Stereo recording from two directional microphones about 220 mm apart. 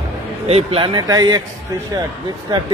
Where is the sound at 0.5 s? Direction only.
25° right (ahead or behind).